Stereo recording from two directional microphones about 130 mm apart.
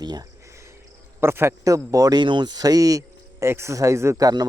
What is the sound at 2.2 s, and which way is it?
Speech, 35° right (ahead or behind).